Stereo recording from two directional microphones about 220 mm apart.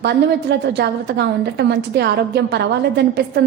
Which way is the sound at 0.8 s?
50° right (ahead or behind).